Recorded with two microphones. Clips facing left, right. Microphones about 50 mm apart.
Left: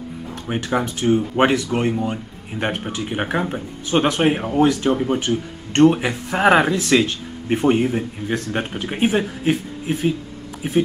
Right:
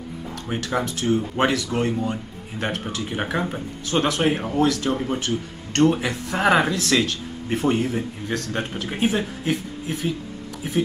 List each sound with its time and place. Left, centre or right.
0.5 s speech: centre